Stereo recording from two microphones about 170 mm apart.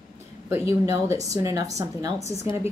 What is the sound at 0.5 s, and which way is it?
A woman's voice, 15° right (ahead or behind).